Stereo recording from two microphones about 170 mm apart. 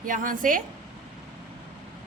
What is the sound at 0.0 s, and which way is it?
Speech, 50° right (ahead or behind).